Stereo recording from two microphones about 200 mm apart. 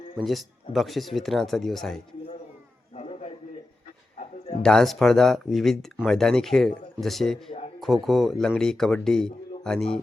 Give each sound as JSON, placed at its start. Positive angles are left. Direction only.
{"t": 0.3, "sound": "speech", "side_deg": 0}
{"t": 2.9, "sound": "a sound", "side_deg": 35}
{"t": 4.6, "sound": "speech", "side_deg": 5}